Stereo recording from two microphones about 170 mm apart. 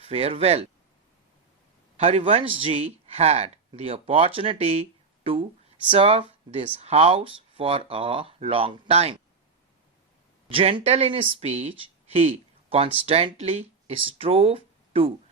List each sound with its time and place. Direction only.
0.0 s speech: 35° right (ahead or behind)
2.0 s speech: 35° right (ahead or behind)
10.5 s speech: 30° right (ahead or behind)